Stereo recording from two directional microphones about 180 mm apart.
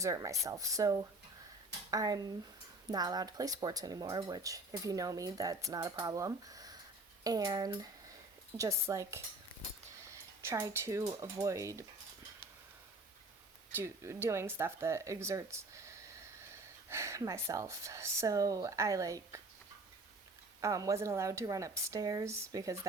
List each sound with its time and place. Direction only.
0.0 s speech: 15° right (ahead or behind)
13.7 s speech: 15° right (ahead or behind)
20.6 s speech: 20° right (ahead or behind)